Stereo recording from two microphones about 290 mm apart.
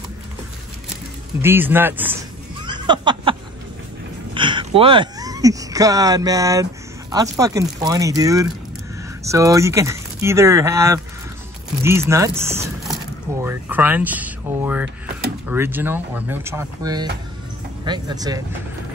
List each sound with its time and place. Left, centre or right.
1.4 s speech: centre
2.6 s a sound: centre
7.3 s speech: centre